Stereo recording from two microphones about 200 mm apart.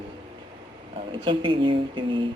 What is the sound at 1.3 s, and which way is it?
Speech, 25° right (ahead or behind).